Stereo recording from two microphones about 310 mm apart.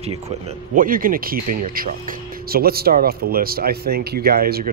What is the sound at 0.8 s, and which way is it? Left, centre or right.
Speech, right.